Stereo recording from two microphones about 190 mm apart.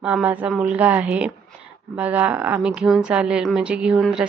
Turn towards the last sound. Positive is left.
turn(degrees=0)  # may be behind; listen again after turning